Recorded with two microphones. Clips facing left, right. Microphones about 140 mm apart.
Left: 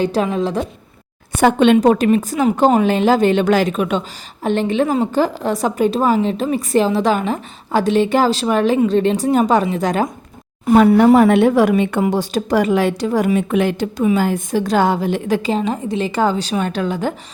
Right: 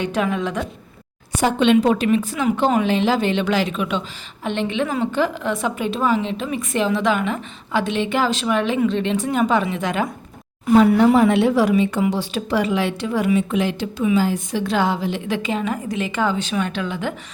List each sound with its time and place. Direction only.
0.0 s a woman's voice: 35° left (ahead or behind)
1.3 s a woman's voice: 55° left (ahead or behind); by 10.1 s 40° left (ahead or behind)
11.2 s a woman's voice: 55° left (ahead or behind)
12.0 s a woman's voice: 45° left (ahead or behind)